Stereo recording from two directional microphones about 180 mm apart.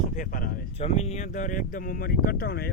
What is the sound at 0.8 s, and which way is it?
Speech, 35° left (ahead or behind).